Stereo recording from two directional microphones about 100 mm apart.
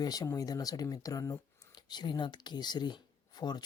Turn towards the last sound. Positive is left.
turn(degrees=45)  # may be behind; listen again after turning